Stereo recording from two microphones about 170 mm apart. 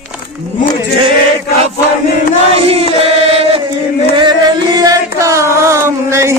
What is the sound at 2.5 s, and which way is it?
Chant, 35° right (ahead or behind).